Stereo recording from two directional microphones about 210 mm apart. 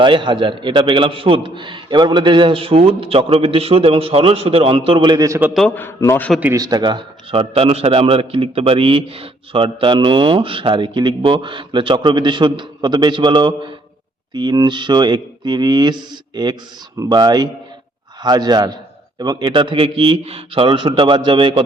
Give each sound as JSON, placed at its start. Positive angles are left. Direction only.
{"t": 0.0, "sound": "a man's voice", "side_deg": -20}
{"t": 5.5, "sound": "a man's voice", "side_deg": 5}
{"t": 6.4, "sound": "a man's voice", "side_deg": -15}